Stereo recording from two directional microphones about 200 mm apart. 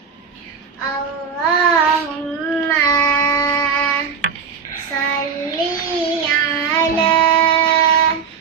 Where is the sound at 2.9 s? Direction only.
15° left (ahead or behind).